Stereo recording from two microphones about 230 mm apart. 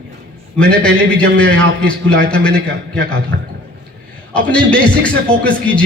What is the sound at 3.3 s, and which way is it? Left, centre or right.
Speech, right.